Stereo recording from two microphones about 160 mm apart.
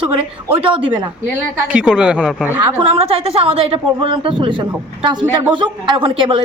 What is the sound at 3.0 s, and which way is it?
Speech, 35° right (ahead or behind).